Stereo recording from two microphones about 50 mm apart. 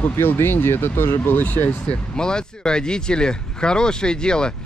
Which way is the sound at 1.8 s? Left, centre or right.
Centre.